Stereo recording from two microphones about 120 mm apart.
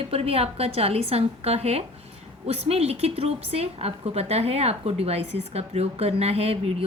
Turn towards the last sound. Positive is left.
turn(degrees=-55)  # may be behind; listen again after turning